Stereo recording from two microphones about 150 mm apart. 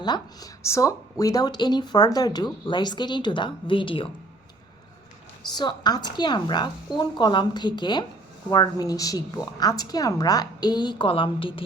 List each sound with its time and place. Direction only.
0.0 s speech: 25° left (ahead or behind)
5.5 s speech: 30° left (ahead or behind)